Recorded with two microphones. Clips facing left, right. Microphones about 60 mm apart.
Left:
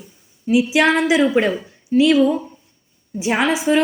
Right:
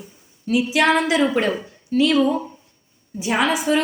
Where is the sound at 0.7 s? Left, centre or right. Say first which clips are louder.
Even; centre.